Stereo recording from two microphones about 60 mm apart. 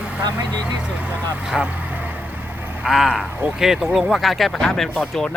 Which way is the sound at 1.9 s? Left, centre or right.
Right.